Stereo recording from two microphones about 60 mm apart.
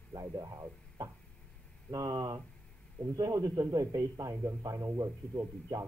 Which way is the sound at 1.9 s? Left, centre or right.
Right.